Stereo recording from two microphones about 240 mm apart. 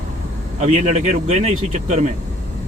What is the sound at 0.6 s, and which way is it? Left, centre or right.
Speech, right.